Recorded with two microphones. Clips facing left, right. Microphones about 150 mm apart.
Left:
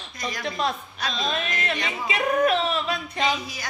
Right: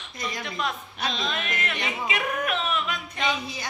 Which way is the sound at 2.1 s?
35° left (ahead or behind).